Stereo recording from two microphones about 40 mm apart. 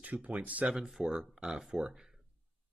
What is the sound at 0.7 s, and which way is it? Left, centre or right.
Speech, centre.